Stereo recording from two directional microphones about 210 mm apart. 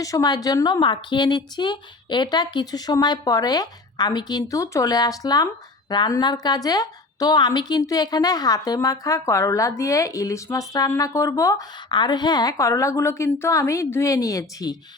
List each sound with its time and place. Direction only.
0.0 s a woman's voice: 15° left (ahead or behind)